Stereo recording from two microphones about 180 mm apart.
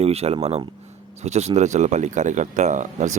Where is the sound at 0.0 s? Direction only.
35° right (ahead or behind).